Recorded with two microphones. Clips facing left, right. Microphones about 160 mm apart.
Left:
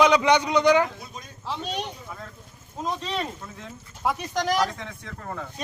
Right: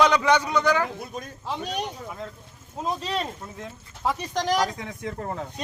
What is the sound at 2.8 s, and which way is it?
Speech, centre (ahead or behind).